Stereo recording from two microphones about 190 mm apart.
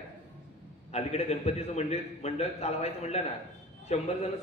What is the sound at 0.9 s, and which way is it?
A man's voice, 35° left (ahead or behind).